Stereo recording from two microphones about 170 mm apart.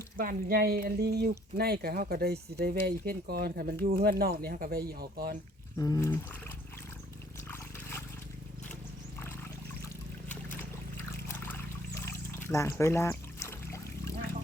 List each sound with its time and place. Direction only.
0.2 s speech: 60° right (ahead or behind)
5.7 s speech: 20° left (ahead or behind)
12.0 s trickle: 15° left (ahead or behind)
12.8 s pour: 15° left (ahead or behind)